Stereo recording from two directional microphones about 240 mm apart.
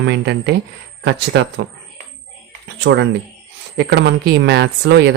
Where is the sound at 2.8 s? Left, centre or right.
Right.